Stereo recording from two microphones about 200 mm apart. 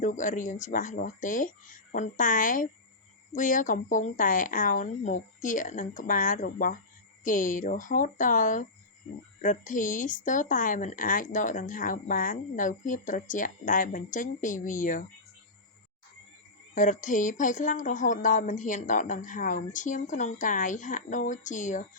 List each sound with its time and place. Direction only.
0.0 s speech: 40° left (ahead or behind)
16.7 s speech: 40° left (ahead or behind)